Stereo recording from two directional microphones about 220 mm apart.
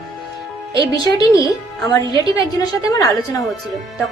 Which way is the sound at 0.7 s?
20° right (ahead or behind).